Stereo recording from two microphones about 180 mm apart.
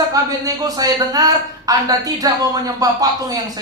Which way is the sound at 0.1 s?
20° right (ahead or behind).